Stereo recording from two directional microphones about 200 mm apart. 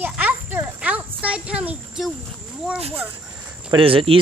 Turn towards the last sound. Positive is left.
turn(degrees=-25)  # may be behind; listen again after turning